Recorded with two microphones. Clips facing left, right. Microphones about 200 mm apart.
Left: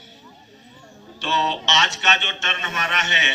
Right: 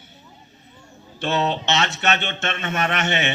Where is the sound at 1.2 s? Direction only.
55° right (ahead or behind).